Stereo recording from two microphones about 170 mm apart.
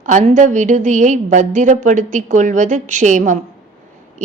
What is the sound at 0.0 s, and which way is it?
A woman's voice, 45° right (ahead or behind).